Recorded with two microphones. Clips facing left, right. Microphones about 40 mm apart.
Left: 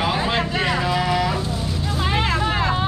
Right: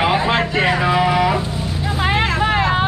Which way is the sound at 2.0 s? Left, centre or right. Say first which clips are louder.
Right 4 dB; right.